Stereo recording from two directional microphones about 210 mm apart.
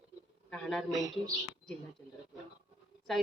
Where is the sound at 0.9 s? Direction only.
15° right (ahead or behind).